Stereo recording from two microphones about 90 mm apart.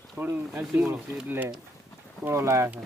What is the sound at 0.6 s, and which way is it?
Speech, 5° right (ahead or behind).